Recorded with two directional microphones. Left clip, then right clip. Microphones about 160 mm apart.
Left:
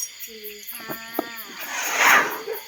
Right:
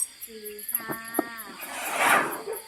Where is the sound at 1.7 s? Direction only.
70° right (ahead or behind).